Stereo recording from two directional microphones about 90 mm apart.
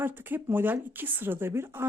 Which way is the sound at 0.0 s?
25° right (ahead or behind).